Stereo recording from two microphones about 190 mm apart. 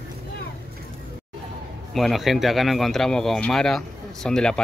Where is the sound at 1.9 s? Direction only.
Centre (ahead or behind).